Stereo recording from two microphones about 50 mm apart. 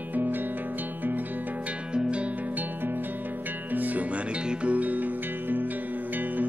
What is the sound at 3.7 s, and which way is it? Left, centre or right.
Music, right.